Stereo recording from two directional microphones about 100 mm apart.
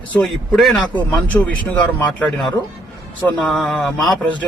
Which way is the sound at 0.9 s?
15° left (ahead or behind).